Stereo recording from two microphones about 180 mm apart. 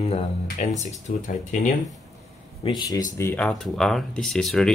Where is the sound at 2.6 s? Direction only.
20° left (ahead or behind).